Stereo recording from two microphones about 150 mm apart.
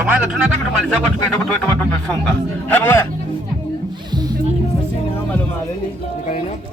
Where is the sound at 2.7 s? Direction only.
15° left (ahead or behind).